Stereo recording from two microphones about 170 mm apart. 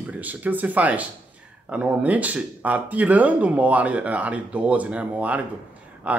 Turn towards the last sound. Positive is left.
turn(degrees=-10)  # may be behind; listen again after turning